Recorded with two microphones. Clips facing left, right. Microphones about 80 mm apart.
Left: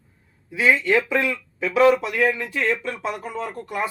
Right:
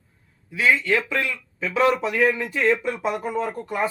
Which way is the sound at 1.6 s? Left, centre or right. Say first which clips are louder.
Left 4 dB; centre.